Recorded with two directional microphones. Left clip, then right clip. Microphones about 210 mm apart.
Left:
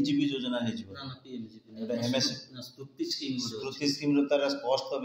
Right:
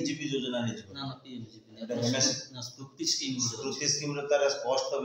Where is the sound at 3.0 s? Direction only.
15° left (ahead or behind).